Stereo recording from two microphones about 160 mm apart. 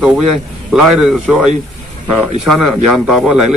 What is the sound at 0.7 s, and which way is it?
A man's voice, 5° right (ahead or behind).